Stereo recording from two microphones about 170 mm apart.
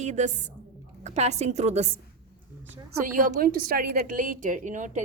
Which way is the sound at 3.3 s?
55° right (ahead or behind).